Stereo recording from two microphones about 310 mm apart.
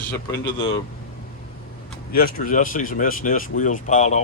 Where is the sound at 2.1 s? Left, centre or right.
Left.